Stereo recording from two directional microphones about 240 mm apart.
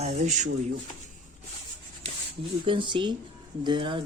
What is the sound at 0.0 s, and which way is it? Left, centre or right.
Speech, right.